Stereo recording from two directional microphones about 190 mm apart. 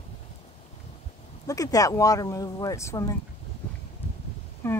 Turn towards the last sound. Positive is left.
turn(degrees=10)  # may be behind; listen again after turning